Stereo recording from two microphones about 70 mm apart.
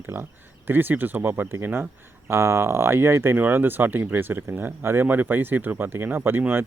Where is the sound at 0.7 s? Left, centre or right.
Right.